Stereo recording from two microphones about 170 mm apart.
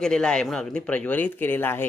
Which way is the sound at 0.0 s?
5° left (ahead or behind).